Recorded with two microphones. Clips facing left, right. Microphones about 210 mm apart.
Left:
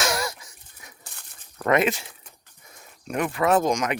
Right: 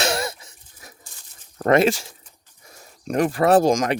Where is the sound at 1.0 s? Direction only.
65° left (ahead or behind).